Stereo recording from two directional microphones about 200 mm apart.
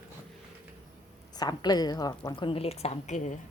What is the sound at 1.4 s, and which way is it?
A woman's voice, 20° left (ahead or behind).